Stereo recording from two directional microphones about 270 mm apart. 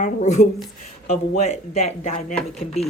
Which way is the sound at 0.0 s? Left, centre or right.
Left.